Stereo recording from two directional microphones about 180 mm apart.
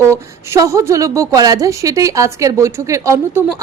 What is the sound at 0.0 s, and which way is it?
A woman's voice, 15° right (ahead or behind).